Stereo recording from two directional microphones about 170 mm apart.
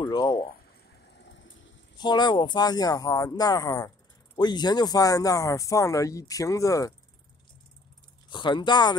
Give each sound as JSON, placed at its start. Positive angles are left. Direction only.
{"t": 0.0, "sound": "a sound", "side_deg": 25}
{"t": 1.1, "sound": "vehicle", "side_deg": 90}
{"t": 2.0, "sound": "speech", "side_deg": 25}
{"t": 8.3, "sound": "speech", "side_deg": 25}